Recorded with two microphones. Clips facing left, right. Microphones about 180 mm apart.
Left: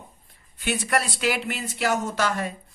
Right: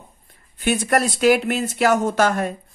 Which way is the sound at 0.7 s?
45° right (ahead or behind).